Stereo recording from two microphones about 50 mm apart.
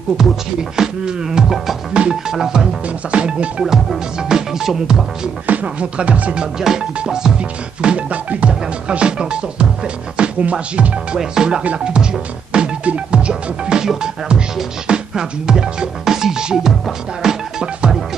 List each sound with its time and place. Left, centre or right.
0.2 s music: centre
3.1 s music: right
3.6 s music: centre
5.5 s music: right
6.3 s music: centre
11.1 s music: centre